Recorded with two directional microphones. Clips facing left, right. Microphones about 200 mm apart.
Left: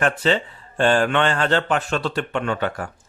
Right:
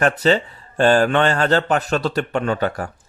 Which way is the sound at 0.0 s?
40° right (ahead or behind).